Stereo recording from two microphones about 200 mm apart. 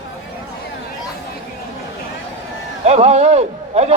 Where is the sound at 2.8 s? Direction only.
35° right (ahead or behind).